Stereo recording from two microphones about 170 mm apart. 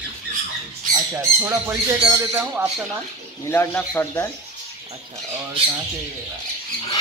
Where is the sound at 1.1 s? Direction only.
15° right (ahead or behind).